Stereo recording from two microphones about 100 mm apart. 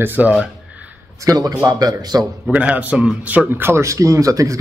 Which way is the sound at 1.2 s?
35° right (ahead or behind).